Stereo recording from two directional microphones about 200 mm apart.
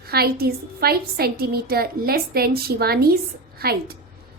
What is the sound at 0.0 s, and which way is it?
A woman's voice, 50° right (ahead or behind).